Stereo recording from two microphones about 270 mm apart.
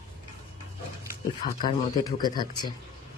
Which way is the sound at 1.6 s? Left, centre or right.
Centre.